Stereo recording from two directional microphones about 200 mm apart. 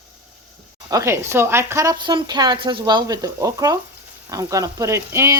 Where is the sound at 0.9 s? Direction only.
15° right (ahead or behind).